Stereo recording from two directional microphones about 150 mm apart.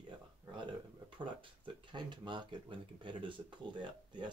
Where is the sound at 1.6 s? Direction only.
30° right (ahead or behind).